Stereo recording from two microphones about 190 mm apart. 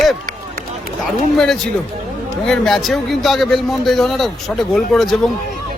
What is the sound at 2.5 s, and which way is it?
A man's voice, centre (ahead or behind).